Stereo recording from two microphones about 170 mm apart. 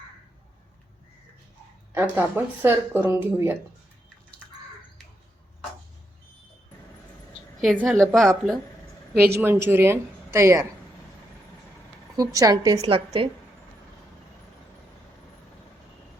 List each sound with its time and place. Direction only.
1.9 s speech: 10° right (ahead or behind)
7.6 s a woman's voice: centre (ahead or behind)
9.3 s speech: 15° right (ahead or behind)
12.1 s a woman's voice: 20° right (ahead or behind)
12.8 s a woman's voice: 30° right (ahead or behind)